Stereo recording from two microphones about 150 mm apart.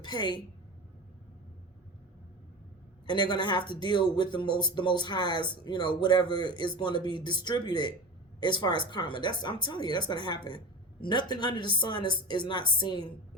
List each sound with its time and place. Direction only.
0.0 s a woman's voice: 30° left (ahead or behind)
3.1 s speech: 30° left (ahead or behind)